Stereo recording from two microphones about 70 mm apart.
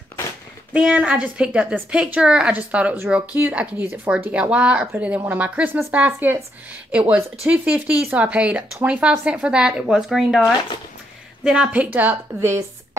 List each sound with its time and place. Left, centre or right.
0.9 s speech: centre
6.9 s speech: centre
11.7 s speech: right
12.4 s a woman's voice: right